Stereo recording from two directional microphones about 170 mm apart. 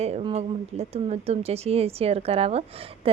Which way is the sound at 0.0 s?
35° right (ahead or behind).